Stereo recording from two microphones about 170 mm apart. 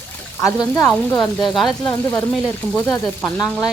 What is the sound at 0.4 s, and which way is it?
Speech, 20° left (ahead or behind).